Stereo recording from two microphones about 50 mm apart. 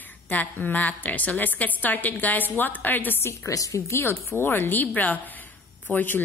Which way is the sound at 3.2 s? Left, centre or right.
Left.